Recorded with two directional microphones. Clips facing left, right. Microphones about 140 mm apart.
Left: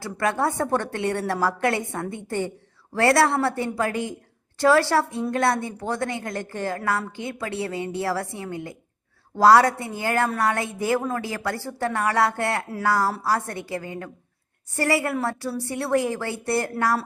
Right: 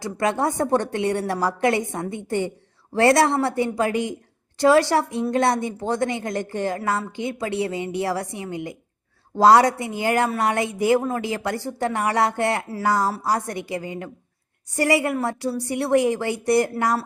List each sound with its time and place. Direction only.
0.0 s speech: 20° right (ahead or behind)